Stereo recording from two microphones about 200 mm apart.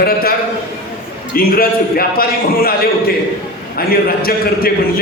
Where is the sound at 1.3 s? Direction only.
50° left (ahead or behind).